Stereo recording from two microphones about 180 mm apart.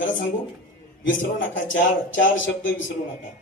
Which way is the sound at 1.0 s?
90° left.